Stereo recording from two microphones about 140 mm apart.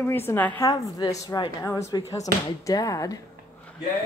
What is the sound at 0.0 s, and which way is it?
Speech, 15° left (ahead or behind).